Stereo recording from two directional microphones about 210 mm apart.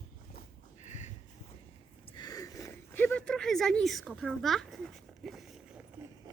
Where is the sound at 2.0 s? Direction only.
20° left (ahead or behind); by 5.8 s centre (ahead or behind).